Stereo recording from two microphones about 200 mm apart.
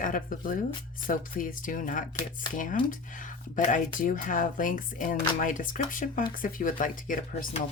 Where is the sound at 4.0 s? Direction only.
40° left (ahead or behind).